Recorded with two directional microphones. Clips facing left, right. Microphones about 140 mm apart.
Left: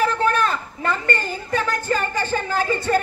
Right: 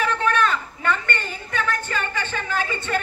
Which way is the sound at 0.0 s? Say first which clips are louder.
Left 2 dB; 35° left (ahead or behind).